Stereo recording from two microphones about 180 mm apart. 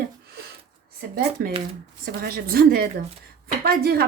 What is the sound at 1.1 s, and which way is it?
Speech, 55° right (ahead or behind).